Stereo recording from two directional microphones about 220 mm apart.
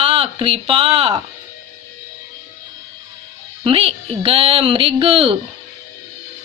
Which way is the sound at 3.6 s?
25° right (ahead or behind).